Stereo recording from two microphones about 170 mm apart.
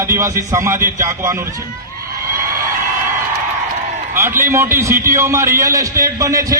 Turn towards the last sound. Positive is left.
turn(degrees=-20)  # may be behind; listen again after turning